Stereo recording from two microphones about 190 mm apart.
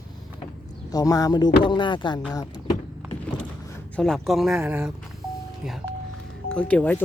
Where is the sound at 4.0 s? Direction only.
Centre (ahead or behind).